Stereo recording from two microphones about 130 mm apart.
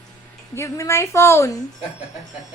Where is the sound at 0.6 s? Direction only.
20° left (ahead or behind).